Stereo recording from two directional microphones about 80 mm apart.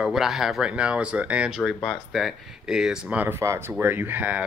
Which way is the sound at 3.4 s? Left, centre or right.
Right.